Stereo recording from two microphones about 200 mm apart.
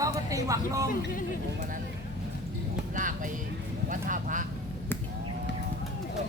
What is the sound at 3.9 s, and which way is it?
Speech, 40° right (ahead or behind).